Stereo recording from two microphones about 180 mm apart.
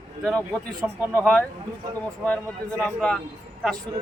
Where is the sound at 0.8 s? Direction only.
10° right (ahead or behind).